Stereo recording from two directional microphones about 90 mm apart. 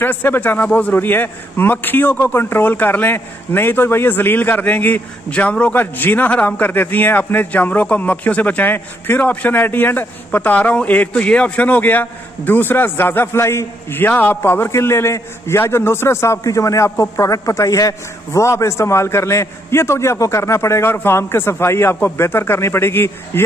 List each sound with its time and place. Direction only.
0.0 s a man's voice: 25° left (ahead or behind)